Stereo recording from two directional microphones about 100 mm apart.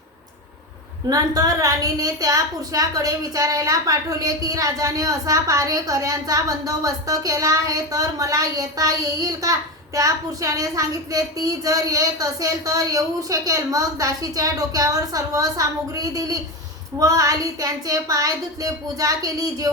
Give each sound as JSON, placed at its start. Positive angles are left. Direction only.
{"t": 1.1, "sound": "speech", "side_deg": -40}